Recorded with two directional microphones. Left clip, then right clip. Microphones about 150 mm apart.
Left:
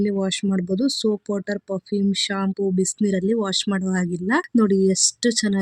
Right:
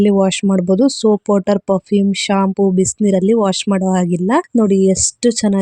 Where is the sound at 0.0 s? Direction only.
45° right (ahead or behind).